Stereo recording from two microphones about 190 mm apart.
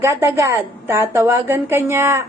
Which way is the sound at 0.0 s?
15° right (ahead or behind).